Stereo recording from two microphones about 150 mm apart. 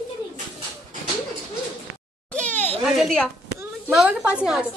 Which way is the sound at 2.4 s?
10° left (ahead or behind).